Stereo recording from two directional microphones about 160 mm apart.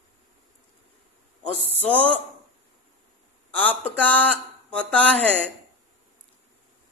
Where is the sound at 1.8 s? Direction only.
10° left (ahead or behind).